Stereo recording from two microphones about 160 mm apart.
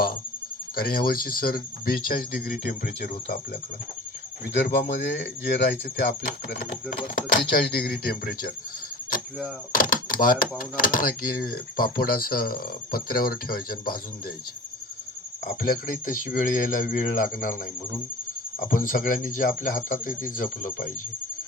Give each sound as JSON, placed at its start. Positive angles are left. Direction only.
{"t": 0.8, "sound": "speech", "side_deg": 65}
{"t": 2.8, "sound": "speech", "side_deg": 90}
{"t": 4.6, "sound": "speech", "side_deg": 90}
{"t": 6.5, "sound": "speech", "side_deg": 75}
{"t": 9.7, "sound": "speech", "side_deg": 60}
{"t": 15.4, "sound": "speech", "side_deg": 60}
{"t": 18.6, "sound": "speech", "side_deg": 55}